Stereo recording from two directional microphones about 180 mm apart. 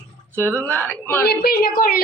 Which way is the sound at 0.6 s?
10° left (ahead or behind).